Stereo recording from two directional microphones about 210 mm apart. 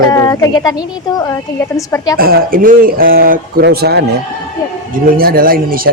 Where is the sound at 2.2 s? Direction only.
45° right (ahead or behind).